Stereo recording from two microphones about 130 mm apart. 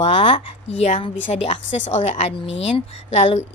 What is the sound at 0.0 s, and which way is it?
A woman's voice, 45° left (ahead or behind).